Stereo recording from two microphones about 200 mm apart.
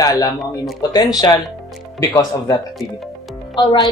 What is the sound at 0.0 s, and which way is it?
A woman's voice, 20° left (ahead or behind).